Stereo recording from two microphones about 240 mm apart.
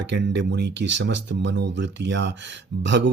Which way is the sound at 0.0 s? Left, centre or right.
Right.